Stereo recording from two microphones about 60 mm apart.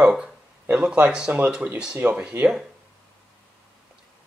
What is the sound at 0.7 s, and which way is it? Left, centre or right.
Speech, right.